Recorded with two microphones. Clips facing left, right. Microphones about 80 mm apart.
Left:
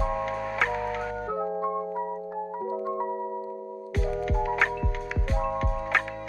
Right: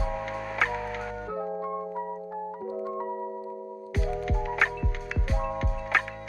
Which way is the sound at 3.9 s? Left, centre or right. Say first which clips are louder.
Left 2 dB; centre.